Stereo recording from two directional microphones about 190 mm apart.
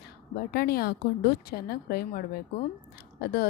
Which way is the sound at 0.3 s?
55° left (ahead or behind).